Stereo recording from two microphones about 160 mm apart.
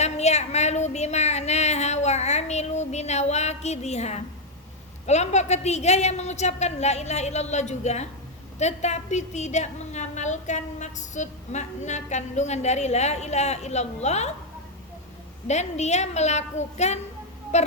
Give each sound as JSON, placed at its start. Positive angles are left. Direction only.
{"t": 0.0, "sound": "a woman's voice", "side_deg": 45}
{"t": 15.4, "sound": "a woman's voice", "side_deg": 45}
{"t": 17.5, "sound": "a sound", "side_deg": 45}